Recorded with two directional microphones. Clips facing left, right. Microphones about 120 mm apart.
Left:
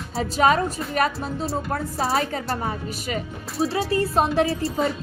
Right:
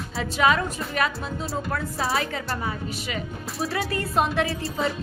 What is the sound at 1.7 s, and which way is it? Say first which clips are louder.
A woman's voice: left 1 dB; 35° left (ahead or behind).